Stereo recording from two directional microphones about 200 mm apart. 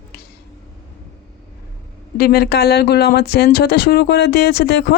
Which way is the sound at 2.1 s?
50° left (ahead or behind).